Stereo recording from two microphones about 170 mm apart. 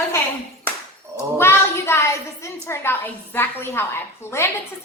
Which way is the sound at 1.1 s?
15° left (ahead or behind).